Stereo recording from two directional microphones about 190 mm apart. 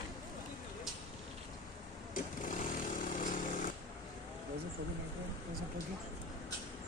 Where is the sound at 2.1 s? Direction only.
45° left (ahead or behind).